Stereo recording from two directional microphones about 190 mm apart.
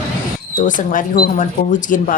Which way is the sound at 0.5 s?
45° left (ahead or behind).